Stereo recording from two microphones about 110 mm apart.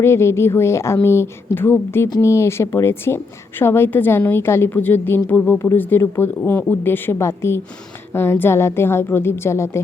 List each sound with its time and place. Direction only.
0.0 s a woman's voice: 25° left (ahead or behind)